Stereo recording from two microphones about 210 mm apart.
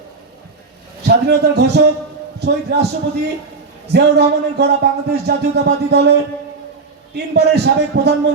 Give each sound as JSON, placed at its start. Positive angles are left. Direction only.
{"t": 1.0, "sound": "music", "side_deg": -50}
{"t": 3.9, "sound": "music", "side_deg": -50}